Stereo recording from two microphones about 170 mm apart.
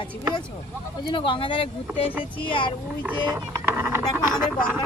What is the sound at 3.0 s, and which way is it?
Speech, 15° right (ahead or behind).